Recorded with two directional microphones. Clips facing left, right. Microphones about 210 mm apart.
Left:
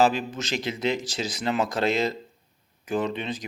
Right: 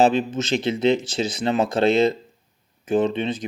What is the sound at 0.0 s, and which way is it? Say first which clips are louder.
Speech: right 4 dB; 25° right (ahead or behind).